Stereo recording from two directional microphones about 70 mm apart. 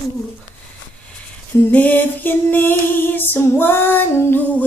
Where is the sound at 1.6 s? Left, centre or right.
Left.